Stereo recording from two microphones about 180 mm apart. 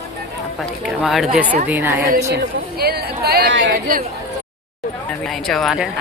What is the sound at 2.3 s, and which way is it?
Speech, 60° right (ahead or behind).